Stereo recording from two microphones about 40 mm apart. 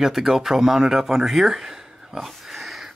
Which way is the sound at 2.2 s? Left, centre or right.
Centre.